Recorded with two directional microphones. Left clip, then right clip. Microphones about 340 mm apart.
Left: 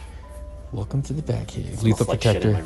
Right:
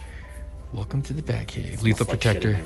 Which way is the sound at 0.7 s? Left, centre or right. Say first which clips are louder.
Left 2 dB; centre.